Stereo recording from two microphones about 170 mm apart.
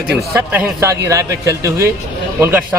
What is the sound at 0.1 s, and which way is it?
A man's voice, 10° right (ahead or behind).